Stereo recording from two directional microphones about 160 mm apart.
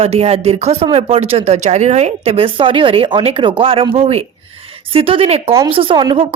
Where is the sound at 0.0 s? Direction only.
40° right (ahead or behind).